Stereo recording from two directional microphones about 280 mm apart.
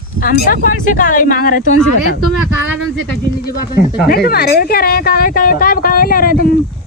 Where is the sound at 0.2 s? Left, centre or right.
Left.